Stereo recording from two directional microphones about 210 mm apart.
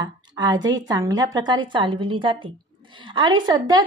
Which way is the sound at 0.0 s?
20° right (ahead or behind).